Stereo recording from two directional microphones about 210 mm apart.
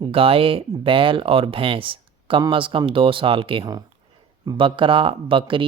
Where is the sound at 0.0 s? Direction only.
25° right (ahead or behind).